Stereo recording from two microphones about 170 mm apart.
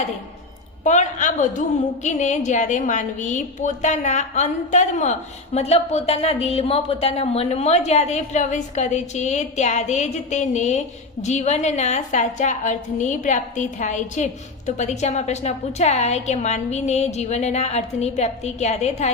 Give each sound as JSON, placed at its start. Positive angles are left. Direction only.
{"t": 0.9, "sound": "a woman's voice", "side_deg": 45}